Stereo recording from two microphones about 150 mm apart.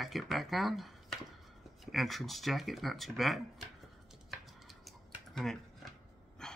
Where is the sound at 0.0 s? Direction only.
Centre (ahead or behind).